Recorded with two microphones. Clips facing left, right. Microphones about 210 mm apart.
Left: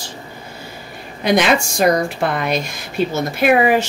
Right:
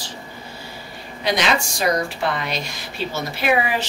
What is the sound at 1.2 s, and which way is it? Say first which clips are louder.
Speech: left 6 dB; 55° left (ahead or behind).